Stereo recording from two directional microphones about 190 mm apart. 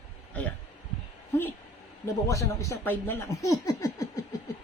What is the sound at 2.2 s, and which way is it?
Speech, 15° left (ahead or behind).